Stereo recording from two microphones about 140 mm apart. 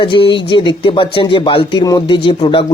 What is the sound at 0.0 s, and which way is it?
Speech, 35° left (ahead or behind).